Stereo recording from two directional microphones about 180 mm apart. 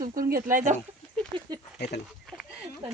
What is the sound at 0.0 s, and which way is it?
Speech, 50° right (ahead or behind).